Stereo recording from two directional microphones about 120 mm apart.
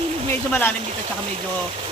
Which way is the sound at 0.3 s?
15° left (ahead or behind).